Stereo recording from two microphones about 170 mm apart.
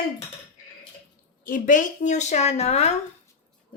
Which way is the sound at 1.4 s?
50° left (ahead or behind).